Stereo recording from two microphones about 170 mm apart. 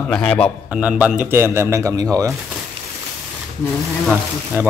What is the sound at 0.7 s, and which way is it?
Speech, 5° right (ahead or behind).